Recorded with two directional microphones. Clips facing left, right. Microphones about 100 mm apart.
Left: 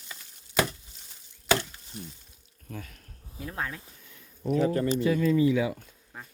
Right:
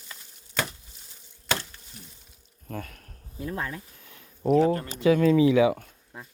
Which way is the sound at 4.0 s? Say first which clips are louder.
Right 8 dB; 65° right (ahead or behind).